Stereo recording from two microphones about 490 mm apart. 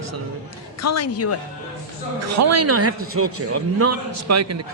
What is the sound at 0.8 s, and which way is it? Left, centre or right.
Speech, left.